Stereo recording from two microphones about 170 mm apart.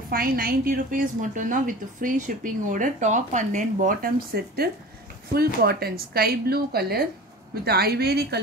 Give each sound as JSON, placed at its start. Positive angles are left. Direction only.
{"t": 0.1, "sound": "a woman's voice", "side_deg": -60}